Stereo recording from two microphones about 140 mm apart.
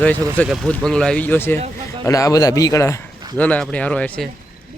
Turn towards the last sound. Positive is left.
turn(degrees=10)  # may be behind; listen again after turning